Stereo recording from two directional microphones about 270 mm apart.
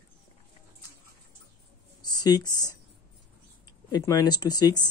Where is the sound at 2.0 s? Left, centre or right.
Centre.